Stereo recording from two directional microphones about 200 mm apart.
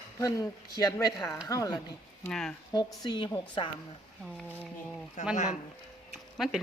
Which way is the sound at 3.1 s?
20° left (ahead or behind).